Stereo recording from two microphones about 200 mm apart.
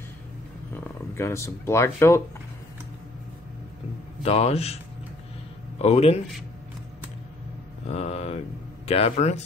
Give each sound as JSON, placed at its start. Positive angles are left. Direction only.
{"t": 1.1, "sound": "speech", "side_deg": 15}
{"t": 4.2, "sound": "a man's voice", "side_deg": 30}
{"t": 5.8, "sound": "a man's voice", "side_deg": 30}
{"t": 7.9, "sound": "a man's voice", "side_deg": 30}